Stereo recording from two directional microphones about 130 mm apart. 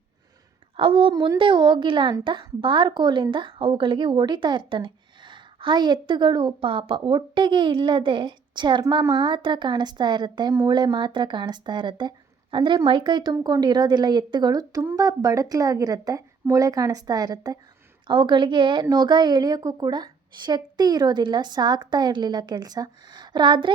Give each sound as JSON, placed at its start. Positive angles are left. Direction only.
{"t": 0.8, "sound": "a woman's voice", "side_deg": -45}